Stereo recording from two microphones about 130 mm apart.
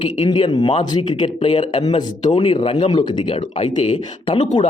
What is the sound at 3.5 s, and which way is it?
Speech, 60° left (ahead or behind).